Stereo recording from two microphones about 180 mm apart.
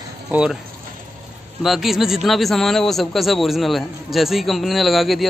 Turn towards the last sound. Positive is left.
turn(degrees=0)  # may be behind; listen again after turning